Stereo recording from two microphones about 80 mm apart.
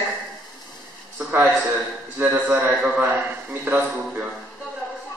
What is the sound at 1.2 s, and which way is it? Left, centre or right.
A man's voice, right.